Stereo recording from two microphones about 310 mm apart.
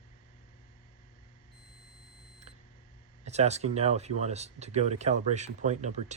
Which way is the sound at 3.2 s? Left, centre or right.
Right.